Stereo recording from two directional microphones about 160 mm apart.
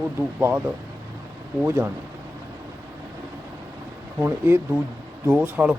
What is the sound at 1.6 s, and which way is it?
Speech, 15° right (ahead or behind).